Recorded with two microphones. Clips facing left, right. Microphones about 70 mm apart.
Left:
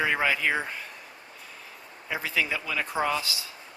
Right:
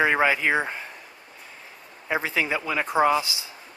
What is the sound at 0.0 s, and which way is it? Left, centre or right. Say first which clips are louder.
Speech: right 4 dB; right.